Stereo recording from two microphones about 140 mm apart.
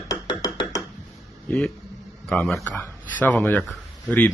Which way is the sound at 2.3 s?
5° left (ahead or behind).